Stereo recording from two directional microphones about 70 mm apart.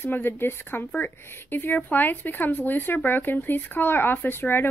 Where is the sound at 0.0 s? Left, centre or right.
Left.